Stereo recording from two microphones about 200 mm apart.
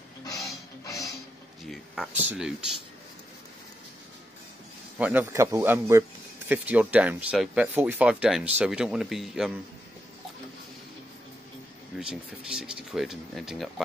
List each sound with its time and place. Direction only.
0.2 s music: 15° left (ahead or behind)
1.7 s speech: centre (ahead or behind)
4.9 s speech: 10° right (ahead or behind)
12.0 s speech: 5° right (ahead or behind)